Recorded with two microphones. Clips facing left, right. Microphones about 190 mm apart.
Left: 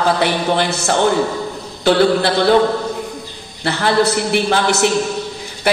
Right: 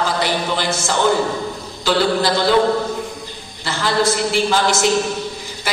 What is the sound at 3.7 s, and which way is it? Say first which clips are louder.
A man's voice: left 3 dB; 65° left (ahead or behind).